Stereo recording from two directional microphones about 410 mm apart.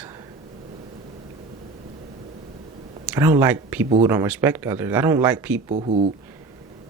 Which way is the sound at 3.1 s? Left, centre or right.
Centre.